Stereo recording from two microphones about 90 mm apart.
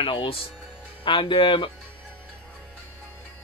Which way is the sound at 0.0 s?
70° left (ahead or behind).